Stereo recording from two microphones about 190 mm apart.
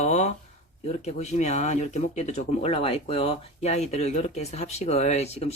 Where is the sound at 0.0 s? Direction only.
35° left (ahead or behind).